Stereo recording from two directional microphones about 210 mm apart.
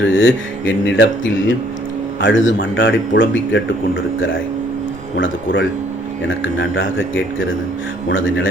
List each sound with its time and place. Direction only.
0.0 s speech: 65° left (ahead or behind)
5.1 s speech: 60° left (ahead or behind)
8.1 s speech: 65° left (ahead or behind)